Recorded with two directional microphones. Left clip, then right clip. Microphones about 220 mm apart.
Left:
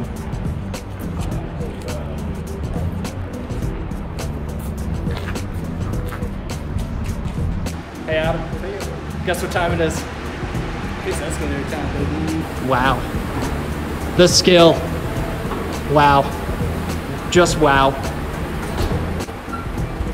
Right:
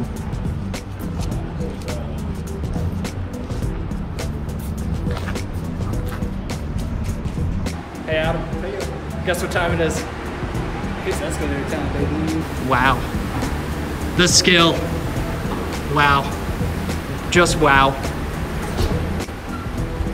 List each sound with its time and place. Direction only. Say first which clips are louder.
8.1 s music: left 1 dB; centre (ahead or behind)
9.2 s speech: even; 5° left (ahead or behind)
12.6 s speech: even; 15° left (ahead or behind)
14.1 s speech: left 3 dB; 20° left (ahead or behind)
16.0 s speech: left 3 dB; 20° left (ahead or behind)
17.3 s speech: even; 15° left (ahead or behind)